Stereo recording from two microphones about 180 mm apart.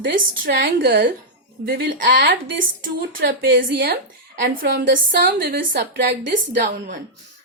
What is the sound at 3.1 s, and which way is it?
Speech, 90° right.